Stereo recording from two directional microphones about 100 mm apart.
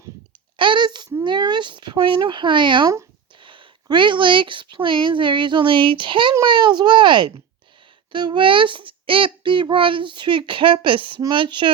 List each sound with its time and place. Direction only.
0.5 s speech: 55° right (ahead or behind)
3.4 s a sound: 60° right (ahead or behind)
3.8 s a child's voice: 55° right (ahead or behind)